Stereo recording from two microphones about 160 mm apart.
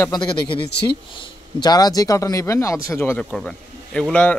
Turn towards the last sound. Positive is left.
turn(degrees=5)  # may be behind; listen again after turning